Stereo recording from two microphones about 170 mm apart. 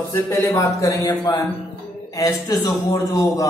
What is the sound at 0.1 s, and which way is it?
A man's voice, 15° left (ahead or behind).